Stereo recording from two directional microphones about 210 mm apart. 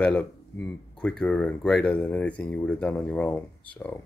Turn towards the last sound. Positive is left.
turn(degrees=5)  # may be behind; listen again after turning